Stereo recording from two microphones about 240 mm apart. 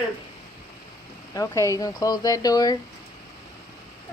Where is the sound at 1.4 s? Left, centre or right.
Centre.